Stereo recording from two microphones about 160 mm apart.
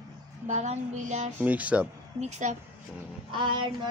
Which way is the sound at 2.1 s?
45° right (ahead or behind).